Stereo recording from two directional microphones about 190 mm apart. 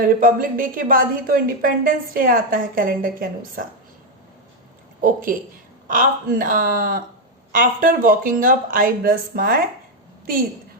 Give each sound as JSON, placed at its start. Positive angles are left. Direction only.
{"t": 0.0, "sound": "a woman's voice", "side_deg": -50}
{"t": 5.0, "sound": "a woman's voice", "side_deg": -45}